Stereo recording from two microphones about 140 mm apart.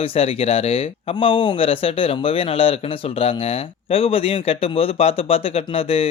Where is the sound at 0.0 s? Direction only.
40° left (ahead or behind).